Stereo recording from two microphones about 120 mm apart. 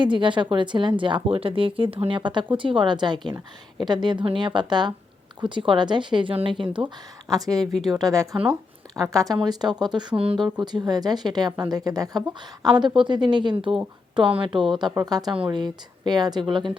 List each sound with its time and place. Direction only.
0.0 s a woman's voice: 40° right (ahead or behind)
7.3 s a woman's voice: 30° right (ahead or behind)